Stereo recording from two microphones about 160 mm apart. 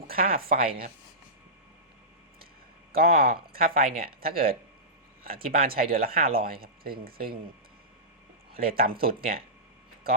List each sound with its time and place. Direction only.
0.1 s speech: 65° right (ahead or behind)
2.9 s speech: 70° right (ahead or behind)
8.5 s speech: 65° right (ahead or behind)